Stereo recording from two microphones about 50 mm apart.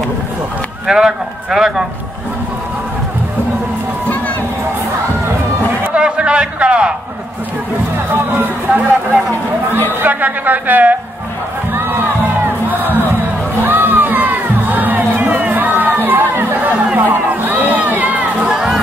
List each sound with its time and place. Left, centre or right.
0.8 s speech: centre
5.9 s a sound: right
8.1 s a woman's voice: right
11.7 s crowd: right
12.7 s music: right
13.7 s crowd: right
18.5 s crowd: centre